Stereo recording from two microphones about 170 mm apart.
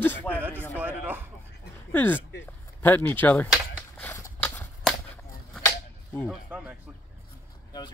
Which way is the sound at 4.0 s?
10° left (ahead or behind).